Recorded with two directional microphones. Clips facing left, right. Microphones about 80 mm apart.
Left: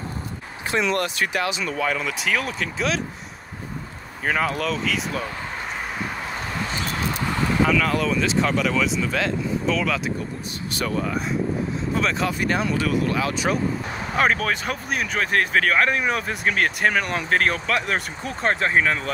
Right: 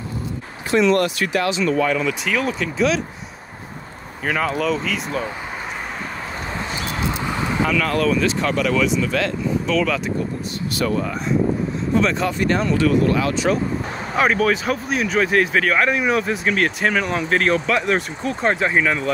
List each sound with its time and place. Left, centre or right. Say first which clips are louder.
0.9 s speech: right 4 dB; left
1.7 s speech: right 6 dB; centre
4.3 s speech: right 3 dB; centre
7.6 s speech: right 2 dB; centre
11.9 s speech: right 5 dB; centre
14.1 s speech: right 4 dB; centre